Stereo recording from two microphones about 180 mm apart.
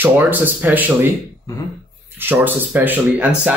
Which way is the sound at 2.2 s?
10° right (ahead or behind).